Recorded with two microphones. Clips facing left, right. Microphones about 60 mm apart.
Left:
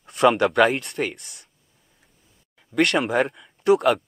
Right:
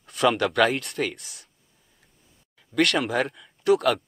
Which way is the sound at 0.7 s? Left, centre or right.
Centre.